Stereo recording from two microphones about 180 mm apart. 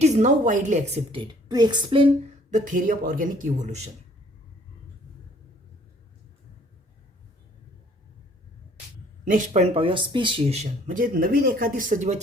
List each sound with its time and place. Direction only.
0.0 s speech: 40° right (ahead or behind)
1.5 s speech: 25° right (ahead or behind)
2.5 s speech: 50° right (ahead or behind)
9.5 s speech: 35° right (ahead or behind)